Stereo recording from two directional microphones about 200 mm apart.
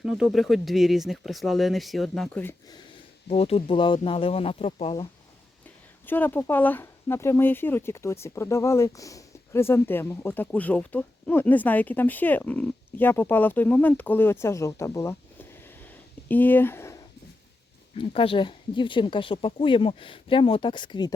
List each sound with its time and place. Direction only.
0.0 s speech: 5° right (ahead or behind); by 2.8 s 15° left (ahead or behind)
3.2 s speech: 30° left (ahead or behind)
6.1 s speech: 10° left (ahead or behind)
17.9 s speech: 25° left (ahead or behind)